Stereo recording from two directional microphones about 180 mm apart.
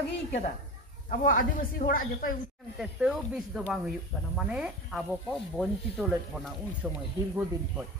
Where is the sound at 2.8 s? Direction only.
Centre (ahead or behind).